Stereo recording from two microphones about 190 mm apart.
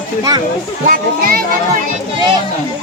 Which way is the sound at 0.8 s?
45° right (ahead or behind).